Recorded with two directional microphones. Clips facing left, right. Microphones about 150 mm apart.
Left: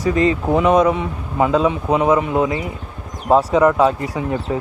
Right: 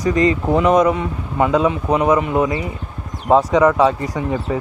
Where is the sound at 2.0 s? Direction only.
25° left (ahead or behind).